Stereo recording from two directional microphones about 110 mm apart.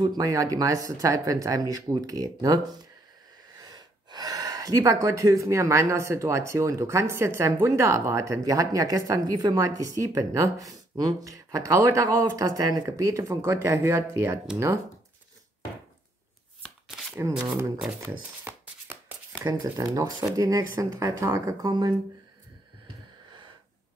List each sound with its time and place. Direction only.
0.0 s speech: 35° right (ahead or behind)
3.6 s speech: 35° right (ahead or behind)
18.4 s shuffling cards: 20° right (ahead or behind)
19.6 s speech: 30° right (ahead or behind)